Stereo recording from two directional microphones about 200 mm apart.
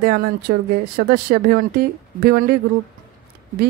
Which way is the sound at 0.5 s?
50° right (ahead or behind).